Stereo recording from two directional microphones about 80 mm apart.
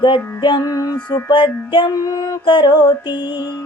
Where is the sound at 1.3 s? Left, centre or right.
Left.